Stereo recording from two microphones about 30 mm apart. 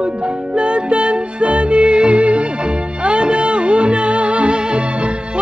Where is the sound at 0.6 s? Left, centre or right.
Right.